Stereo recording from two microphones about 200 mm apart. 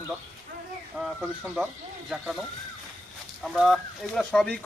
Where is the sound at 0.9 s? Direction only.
Centre (ahead or behind).